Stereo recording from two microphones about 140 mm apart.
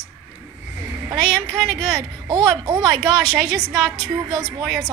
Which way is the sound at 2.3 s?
30° right (ahead or behind).